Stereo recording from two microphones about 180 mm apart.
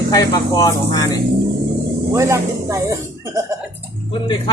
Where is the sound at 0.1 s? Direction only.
20° left (ahead or behind).